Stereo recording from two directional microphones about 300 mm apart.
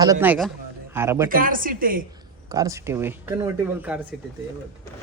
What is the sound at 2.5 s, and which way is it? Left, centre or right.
Speech, centre.